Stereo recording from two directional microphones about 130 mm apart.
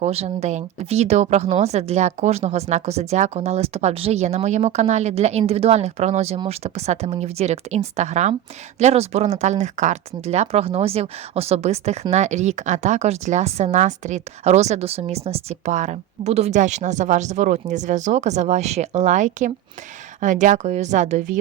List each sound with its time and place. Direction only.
0.0 s speech: 55° right (ahead or behind)